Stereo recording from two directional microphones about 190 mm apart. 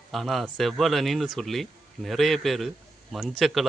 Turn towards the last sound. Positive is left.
turn(degrees=0)  # may be behind; listen again after turning